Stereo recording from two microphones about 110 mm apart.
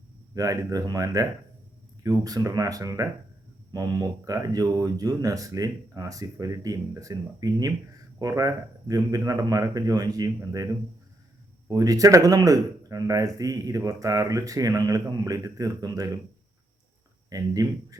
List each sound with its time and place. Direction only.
0.3 s speech: 35° right (ahead or behind)
17.2 s speech: 35° right (ahead or behind)